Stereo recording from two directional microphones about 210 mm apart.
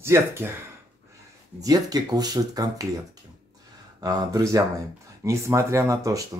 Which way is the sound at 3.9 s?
15° right (ahead or behind).